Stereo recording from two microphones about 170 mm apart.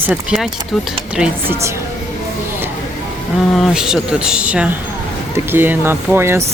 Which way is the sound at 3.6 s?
5° right (ahead or behind).